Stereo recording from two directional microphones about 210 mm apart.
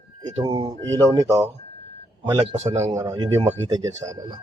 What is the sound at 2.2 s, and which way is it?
Speech, 30° right (ahead or behind).